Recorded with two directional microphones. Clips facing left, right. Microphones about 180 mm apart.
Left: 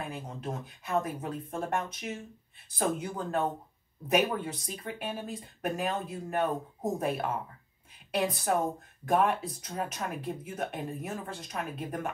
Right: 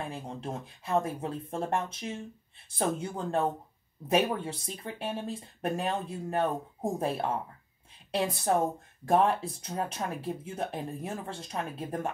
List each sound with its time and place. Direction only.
0.0 s speech: 30° right (ahead or behind)